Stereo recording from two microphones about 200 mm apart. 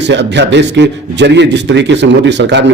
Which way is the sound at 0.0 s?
60° right (ahead or behind).